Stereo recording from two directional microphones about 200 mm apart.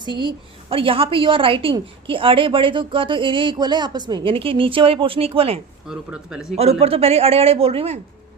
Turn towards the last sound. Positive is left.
turn(degrees=-30)  # may be behind; listen again after turning